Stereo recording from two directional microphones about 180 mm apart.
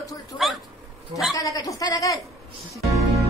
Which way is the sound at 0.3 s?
20° left (ahead or behind).